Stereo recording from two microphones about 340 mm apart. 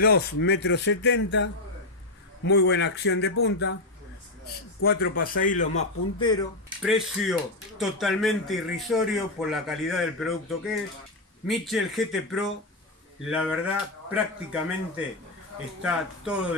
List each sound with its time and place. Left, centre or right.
0.0 s speech: left
5.2 s a man's voice: left
5.8 s a man's voice: centre
6.8 s speech: centre
15.8 s speech: centre